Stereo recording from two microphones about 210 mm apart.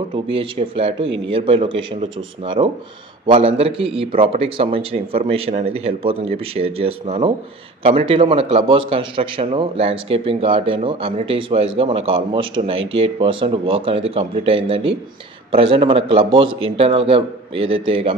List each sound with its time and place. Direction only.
0.1 s a man's voice: 25° right (ahead or behind)
3.3 s a man's voice: 25° right (ahead or behind)